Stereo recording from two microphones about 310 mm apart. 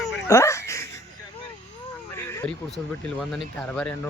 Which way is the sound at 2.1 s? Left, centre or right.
Centre.